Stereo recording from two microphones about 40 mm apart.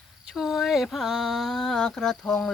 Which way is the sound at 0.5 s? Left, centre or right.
Centre.